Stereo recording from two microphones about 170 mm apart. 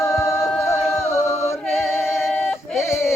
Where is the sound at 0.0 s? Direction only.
15° left (ahead or behind).